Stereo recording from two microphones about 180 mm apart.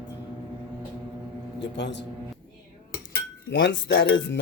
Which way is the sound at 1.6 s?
75° left (ahead or behind).